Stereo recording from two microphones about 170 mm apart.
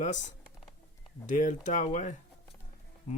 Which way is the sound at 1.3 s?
50° left (ahead or behind).